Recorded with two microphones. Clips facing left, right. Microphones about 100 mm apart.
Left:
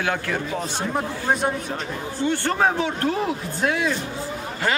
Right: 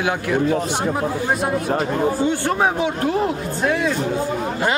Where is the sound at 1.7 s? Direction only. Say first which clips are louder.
Right 10 dB; 60° right (ahead or behind).